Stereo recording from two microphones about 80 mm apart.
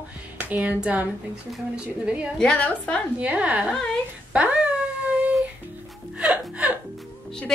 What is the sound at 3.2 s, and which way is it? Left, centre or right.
Speech, centre.